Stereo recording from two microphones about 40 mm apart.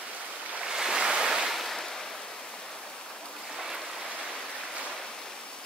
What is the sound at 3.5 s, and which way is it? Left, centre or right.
Stream, centre.